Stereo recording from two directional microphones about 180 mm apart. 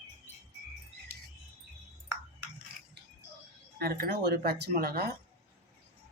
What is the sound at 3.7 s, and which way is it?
Speech, 60° right (ahead or behind).